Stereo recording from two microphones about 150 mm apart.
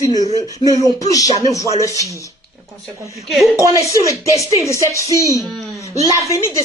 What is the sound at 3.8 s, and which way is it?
Female singing, 20° left (ahead or behind).